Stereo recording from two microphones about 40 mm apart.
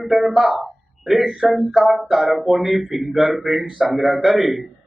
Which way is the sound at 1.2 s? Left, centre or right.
Centre.